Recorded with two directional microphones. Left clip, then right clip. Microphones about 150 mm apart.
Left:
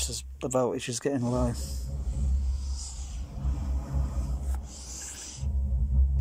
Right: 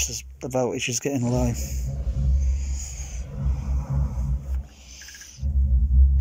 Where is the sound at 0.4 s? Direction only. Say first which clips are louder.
Right 3 dB; centre (ahead or behind).